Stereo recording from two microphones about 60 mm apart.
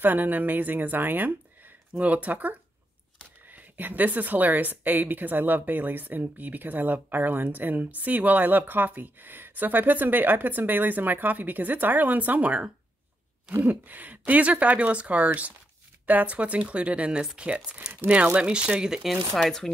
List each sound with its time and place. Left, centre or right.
0.0 s speech: right; by 18.9 s centre
19.0 s speech: centre